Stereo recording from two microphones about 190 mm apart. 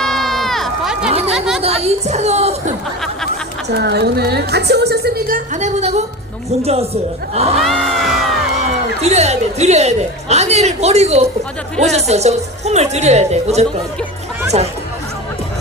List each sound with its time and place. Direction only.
0.0 s run: centre (ahead or behind)
1.3 s chatter: centre (ahead or behind)
1.6 s a woman's voice: 30° right (ahead or behind)
3.7 s a woman's voice: 60° right (ahead or behind)
5.5 s a woman's voice: 35° right (ahead or behind)
7.6 s music: centre (ahead or behind)
9.0 s a woman's voice: 35° right (ahead or behind)